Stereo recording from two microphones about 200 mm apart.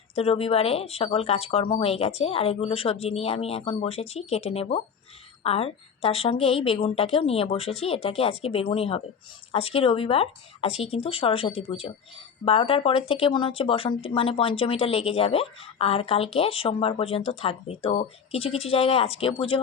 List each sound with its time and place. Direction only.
0.2 s speech: 30° left (ahead or behind)